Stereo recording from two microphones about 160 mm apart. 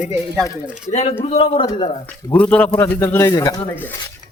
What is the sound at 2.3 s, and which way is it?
Speech, 10° left (ahead or behind).